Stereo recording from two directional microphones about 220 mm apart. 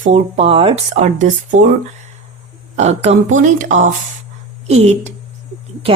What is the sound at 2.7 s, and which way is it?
Speech, 30° right (ahead or behind).